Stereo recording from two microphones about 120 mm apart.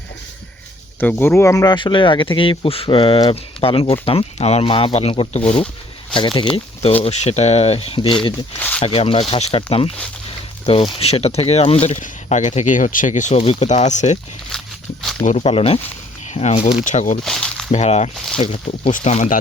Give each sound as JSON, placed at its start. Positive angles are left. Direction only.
{"t": 0.9, "sound": "speech", "side_deg": 15}
{"t": 1.7, "sound": "speech", "side_deg": 40}
{"t": 7.0, "sound": "speech", "side_deg": 65}
{"t": 8.5, "sound": "speech", "side_deg": 15}
{"t": 8.8, "sound": "speech", "side_deg": 55}
{"t": 13.4, "sound": "speech", "side_deg": 60}
{"t": 15.2, "sound": "speech", "side_deg": 80}
{"t": 16.3, "sound": "speech", "side_deg": 65}
{"t": 16.8, "sound": "speech", "side_deg": 85}
{"t": 17.2, "sound": "a sound", "side_deg": 5}
{"t": 17.7, "sound": "speech", "side_deg": 65}
{"t": 18.3, "sound": "speech", "side_deg": 55}
{"t": 18.9, "sound": "speech", "side_deg": 90}